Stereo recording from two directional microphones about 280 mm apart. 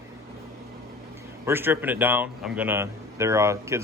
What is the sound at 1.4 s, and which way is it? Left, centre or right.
A man's voice, centre.